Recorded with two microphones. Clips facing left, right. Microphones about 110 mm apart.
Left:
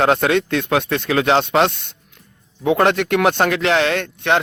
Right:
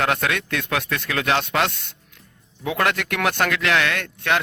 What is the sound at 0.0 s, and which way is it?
Speech, 25° left (ahead or behind).